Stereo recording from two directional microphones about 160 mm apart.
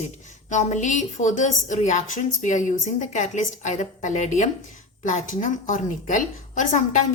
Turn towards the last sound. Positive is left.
turn(degrees=55)  # may be behind; listen again after turning